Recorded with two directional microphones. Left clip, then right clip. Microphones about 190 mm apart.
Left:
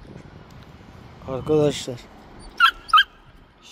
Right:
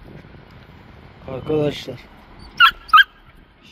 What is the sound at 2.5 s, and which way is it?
Dog, 25° right (ahead or behind).